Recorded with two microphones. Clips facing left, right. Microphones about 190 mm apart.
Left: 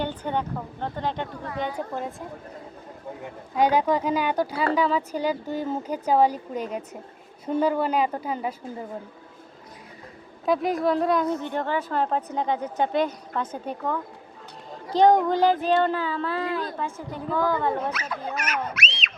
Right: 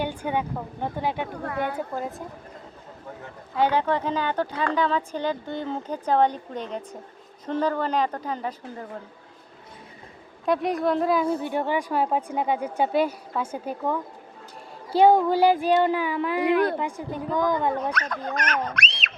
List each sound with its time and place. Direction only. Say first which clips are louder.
0.0 s a woman's voice: right 1 dB; 10° right (ahead or behind)
1.5 s a woman's voice: right 2 dB; 55° right (ahead or behind)
2.0 s a woman's voice: right 1 dB; centre (ahead or behind)
3.2 s speech: left 1 dB; 15° left (ahead or behind)
10.4 s a woman's voice: even; centre (ahead or behind); by 17.9 s 15° right (ahead or behind)
17.9 s speech: right 2 dB; 5° left (ahead or behind)